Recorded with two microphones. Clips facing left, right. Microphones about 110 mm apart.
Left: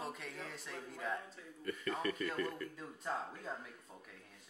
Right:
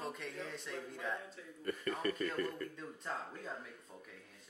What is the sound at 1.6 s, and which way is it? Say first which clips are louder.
Speech: right 1 dB; 40° right (ahead or behind).